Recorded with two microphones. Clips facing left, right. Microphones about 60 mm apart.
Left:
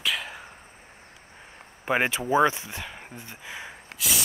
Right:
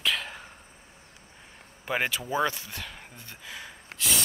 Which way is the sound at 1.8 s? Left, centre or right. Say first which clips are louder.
Left 4 dB; left.